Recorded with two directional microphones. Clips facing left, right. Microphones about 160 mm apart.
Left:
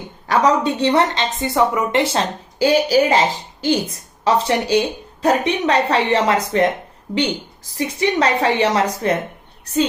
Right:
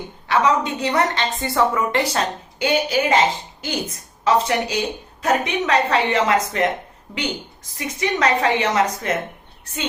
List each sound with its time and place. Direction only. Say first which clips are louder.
0.3 s a woman's voice: left 3 dB; 35° left (ahead or behind)